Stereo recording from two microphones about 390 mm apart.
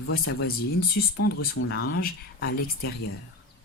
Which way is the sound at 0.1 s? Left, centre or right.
Left.